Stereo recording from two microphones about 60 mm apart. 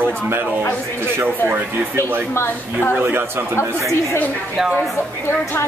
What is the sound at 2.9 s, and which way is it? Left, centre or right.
Speech, right.